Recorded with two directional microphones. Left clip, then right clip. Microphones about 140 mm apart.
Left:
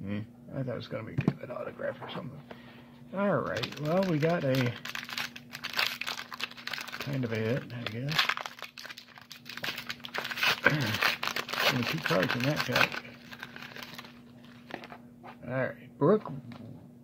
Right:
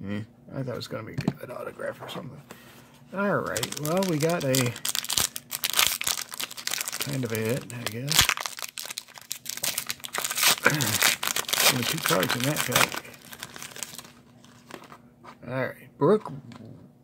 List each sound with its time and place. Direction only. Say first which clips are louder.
0.0 s speech: right 3 dB; 35° right (ahead or behind)
3.1 s typing: right 3 dB; 30° right (ahead or behind)
9.6 s crumpling: right 3 dB; 20° right (ahead or behind)
10.6 s speech: right 4 dB; 20° right (ahead or behind)
15.4 s speech: right 2 dB; 30° right (ahead or behind)